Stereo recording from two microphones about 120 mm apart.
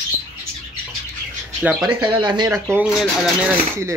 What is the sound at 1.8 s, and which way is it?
Speech, 35° right (ahead or behind).